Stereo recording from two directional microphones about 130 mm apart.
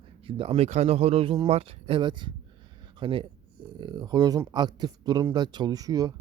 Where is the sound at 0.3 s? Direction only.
45° right (ahead or behind).